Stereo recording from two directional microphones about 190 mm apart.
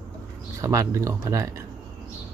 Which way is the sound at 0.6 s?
15° right (ahead or behind).